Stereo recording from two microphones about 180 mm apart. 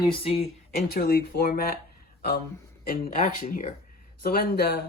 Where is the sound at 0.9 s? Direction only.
60° left (ahead or behind).